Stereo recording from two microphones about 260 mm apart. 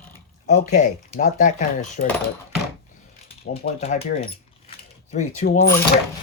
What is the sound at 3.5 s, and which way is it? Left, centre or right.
Speech, left.